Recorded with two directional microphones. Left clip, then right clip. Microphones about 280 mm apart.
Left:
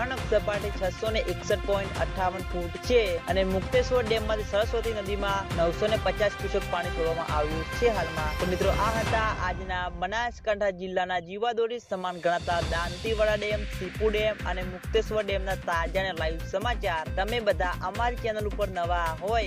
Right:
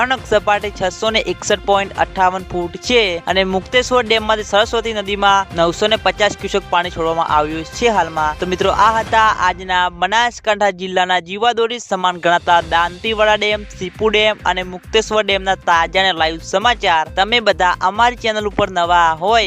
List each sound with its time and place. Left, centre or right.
0.0 s speech: right